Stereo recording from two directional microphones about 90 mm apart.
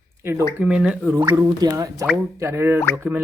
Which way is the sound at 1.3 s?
50° right (ahead or behind).